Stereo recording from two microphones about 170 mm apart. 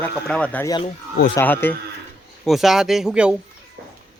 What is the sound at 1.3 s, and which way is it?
Speech, 10° left (ahead or behind).